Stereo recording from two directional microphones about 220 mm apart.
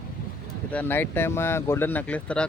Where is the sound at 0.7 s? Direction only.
10° left (ahead or behind).